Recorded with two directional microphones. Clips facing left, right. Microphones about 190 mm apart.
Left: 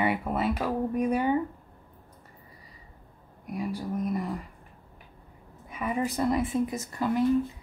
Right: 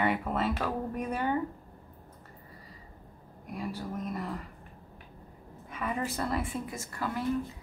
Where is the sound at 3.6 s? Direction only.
15° left (ahead or behind).